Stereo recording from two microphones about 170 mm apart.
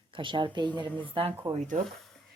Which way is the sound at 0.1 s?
30° right (ahead or behind).